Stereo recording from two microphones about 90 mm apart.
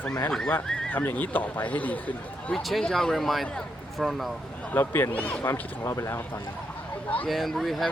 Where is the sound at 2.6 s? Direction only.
5° left (ahead or behind).